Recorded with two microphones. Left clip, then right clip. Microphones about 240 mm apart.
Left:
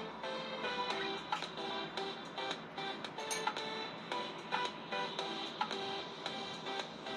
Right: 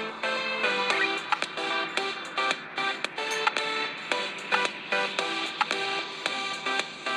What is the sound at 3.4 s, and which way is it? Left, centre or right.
Music, right.